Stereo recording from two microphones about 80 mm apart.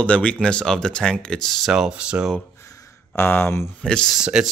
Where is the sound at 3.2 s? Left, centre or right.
Left.